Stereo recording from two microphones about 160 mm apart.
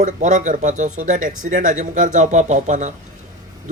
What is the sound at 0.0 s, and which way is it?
Speech, 50° right (ahead or behind).